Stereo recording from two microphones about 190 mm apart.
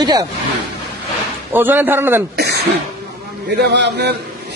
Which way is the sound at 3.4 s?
60° right (ahead or behind).